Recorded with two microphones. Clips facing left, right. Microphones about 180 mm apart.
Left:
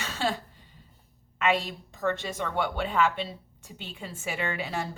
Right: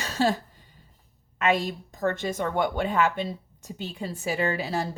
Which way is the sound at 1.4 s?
45° right (ahead or behind).